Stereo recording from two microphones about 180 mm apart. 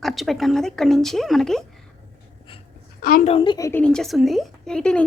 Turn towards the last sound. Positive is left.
turn(degrees=5)  # may be behind; listen again after turning